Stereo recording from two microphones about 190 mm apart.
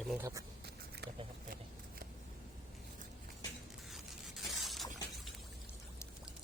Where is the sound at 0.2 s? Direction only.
15° right (ahead or behind).